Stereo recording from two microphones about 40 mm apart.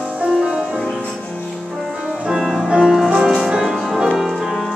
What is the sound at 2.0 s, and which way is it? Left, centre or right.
Music, centre.